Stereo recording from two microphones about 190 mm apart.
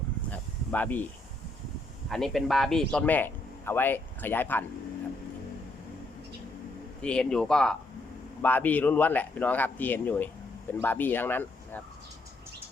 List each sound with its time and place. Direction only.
0.3 s snake: 10° left (ahead or behind)
2.0 s speech: centre (ahead or behind)
7.0 s speech: 5° left (ahead or behind)